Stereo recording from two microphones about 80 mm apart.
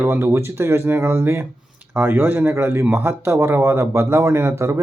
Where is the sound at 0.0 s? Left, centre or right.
Right.